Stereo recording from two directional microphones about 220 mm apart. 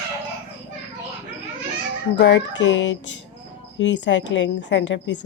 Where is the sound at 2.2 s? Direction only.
55° left (ahead or behind).